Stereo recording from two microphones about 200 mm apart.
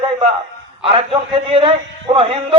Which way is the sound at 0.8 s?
25° right (ahead or behind).